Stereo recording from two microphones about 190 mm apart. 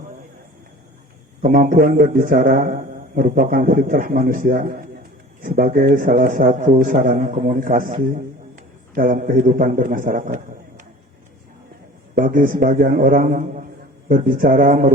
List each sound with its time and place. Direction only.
1.4 s a man's voice: 45° right (ahead or behind)
12.1 s a man's voice: 45° right (ahead or behind)